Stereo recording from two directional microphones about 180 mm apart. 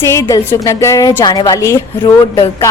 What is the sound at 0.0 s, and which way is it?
A woman's voice, 15° left (ahead or behind).